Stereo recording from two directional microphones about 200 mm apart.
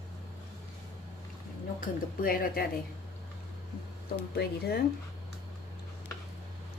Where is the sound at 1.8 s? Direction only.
45° left (ahead or behind).